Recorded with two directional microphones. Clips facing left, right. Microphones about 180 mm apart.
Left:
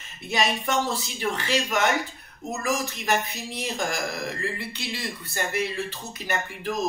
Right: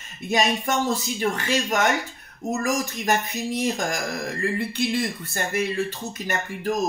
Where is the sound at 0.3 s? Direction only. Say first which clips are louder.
Right 3 dB; 45° right (ahead or behind).